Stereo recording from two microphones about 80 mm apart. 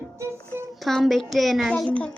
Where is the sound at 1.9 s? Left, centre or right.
Centre.